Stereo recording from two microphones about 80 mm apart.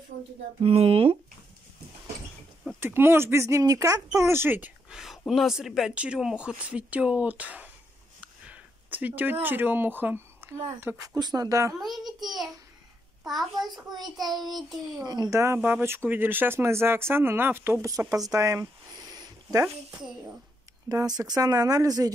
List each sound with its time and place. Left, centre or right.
2.8 s speech: right
4.8 s a sound: centre
5.6 s a child's voice: centre; by 11.0 s right
11.1 s speech: right
12.1 s child singing: centre
13.2 s a child's voice: centre
15.0 s speech: right
15.6 s speech: right
17.8 s speech: right
18.3 s a sound: right
20.9 s speech: right